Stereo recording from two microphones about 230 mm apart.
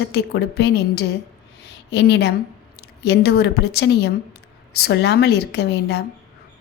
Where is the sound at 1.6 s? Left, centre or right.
Left.